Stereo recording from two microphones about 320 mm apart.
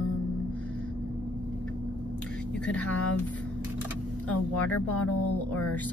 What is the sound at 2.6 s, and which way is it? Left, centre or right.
Speech, centre.